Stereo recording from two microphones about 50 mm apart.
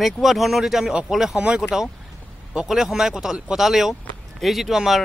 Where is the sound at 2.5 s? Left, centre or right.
Centre.